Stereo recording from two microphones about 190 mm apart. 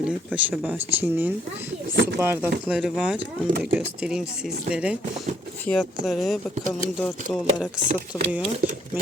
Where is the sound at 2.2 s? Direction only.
10° right (ahead or behind); by 7.1 s 5° left (ahead or behind).